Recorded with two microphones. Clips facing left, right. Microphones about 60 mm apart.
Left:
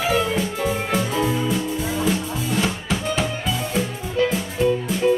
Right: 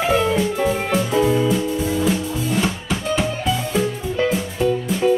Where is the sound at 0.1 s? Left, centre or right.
Centre.